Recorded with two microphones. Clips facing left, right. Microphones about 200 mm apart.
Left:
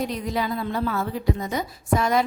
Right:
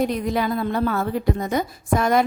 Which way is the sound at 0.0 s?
55° right (ahead or behind).